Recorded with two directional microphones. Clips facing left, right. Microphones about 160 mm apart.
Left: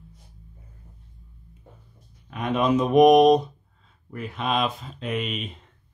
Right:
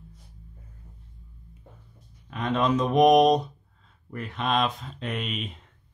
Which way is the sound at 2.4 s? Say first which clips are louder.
Left 2 dB; 10° left (ahead or behind).